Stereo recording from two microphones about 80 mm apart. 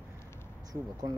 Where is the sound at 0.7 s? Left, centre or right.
Right.